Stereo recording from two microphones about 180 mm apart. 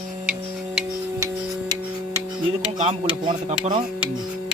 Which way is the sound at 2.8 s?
30° right (ahead or behind).